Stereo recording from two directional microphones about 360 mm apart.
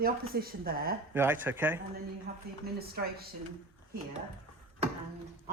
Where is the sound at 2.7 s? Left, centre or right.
Right.